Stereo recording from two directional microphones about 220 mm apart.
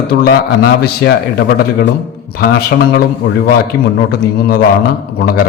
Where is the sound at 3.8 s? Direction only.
45° left (ahead or behind).